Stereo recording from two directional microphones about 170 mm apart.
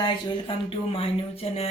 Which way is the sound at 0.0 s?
30° left (ahead or behind).